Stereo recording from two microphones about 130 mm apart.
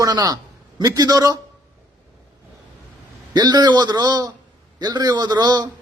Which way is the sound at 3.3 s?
30° right (ahead or behind).